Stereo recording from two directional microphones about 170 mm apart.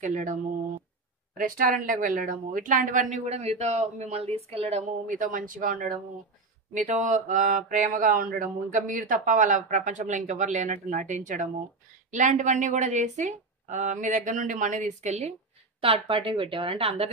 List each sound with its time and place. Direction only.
0.0 s mantra: 50° right (ahead or behind)
15.8 s a woman's voice: 35° right (ahead or behind)